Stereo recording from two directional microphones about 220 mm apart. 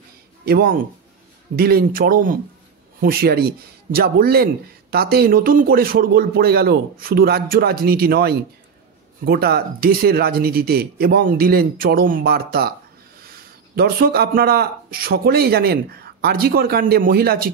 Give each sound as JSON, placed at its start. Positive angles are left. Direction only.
{"t": 0.5, "sound": "speech", "side_deg": -45}